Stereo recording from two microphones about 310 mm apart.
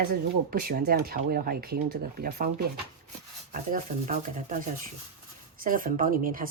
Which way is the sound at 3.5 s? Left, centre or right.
Right.